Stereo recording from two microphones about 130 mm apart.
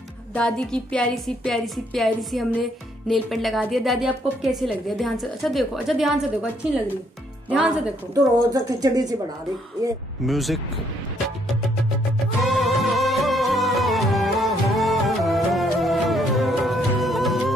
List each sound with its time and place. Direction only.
0.3 s a woman's voice: 10° left (ahead or behind)
7.4 s speech: 10° right (ahead or behind)
8.1 s speech: 25° right (ahead or behind)
10.2 s a woman's voice: centre (ahead or behind)
12.4 s music: centre (ahead or behind)